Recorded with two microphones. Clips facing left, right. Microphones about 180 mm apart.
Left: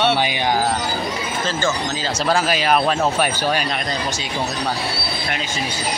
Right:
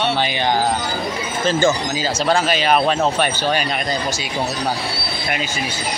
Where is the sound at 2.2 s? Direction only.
5° left (ahead or behind).